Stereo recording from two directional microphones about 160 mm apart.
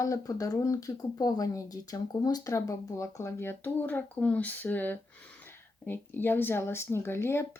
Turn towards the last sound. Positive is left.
turn(degrees=15)  # may be behind; listen again after turning